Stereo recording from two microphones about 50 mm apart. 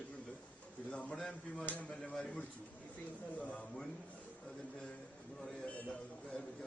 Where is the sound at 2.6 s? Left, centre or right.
Left; by 5.7 s centre.